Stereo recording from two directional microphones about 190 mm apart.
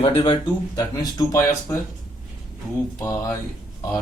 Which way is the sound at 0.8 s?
15° left (ahead or behind).